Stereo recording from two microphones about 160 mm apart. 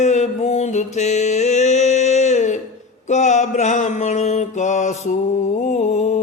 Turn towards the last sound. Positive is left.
turn(degrees=45)  # may be behind; listen again after turning